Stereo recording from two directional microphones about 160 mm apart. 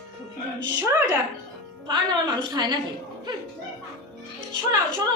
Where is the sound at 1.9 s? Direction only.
25° right (ahead or behind).